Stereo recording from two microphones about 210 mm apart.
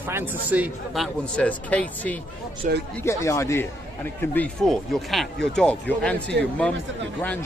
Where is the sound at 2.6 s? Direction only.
40° right (ahead or behind).